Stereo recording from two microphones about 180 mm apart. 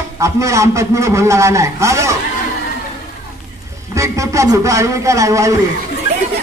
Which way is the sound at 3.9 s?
15° right (ahead or behind).